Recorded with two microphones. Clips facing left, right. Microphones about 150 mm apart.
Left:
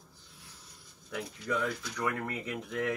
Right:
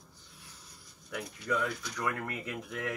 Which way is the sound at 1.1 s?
30° left (ahead or behind).